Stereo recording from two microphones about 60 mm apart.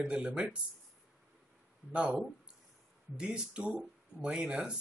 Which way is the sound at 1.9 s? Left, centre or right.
Right.